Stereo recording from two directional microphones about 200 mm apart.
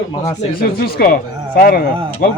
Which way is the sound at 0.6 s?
50° left (ahead or behind).